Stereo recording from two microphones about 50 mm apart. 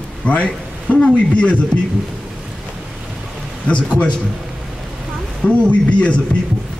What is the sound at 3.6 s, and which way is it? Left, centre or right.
Speech, left.